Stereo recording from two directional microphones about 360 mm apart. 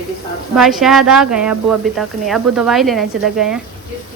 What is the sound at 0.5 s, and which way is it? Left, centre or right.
Speech, centre.